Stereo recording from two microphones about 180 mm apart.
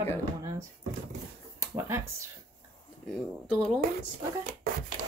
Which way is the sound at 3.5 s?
5° left (ahead or behind).